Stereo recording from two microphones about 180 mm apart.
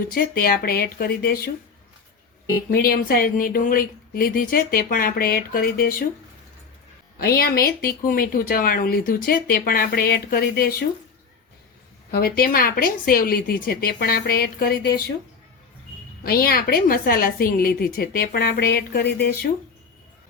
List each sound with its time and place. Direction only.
0.1 s speech: 55° left (ahead or behind)
2.6 s speech: 55° left (ahead or behind)
7.2 s speech: 55° left (ahead or behind)
12.1 s speech: 55° left (ahead or behind)
16.2 s speech: 55° left (ahead or behind)